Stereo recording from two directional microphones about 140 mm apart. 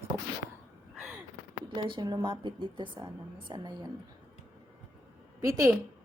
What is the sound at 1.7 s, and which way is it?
A woman's voice, 35° right (ahead or behind).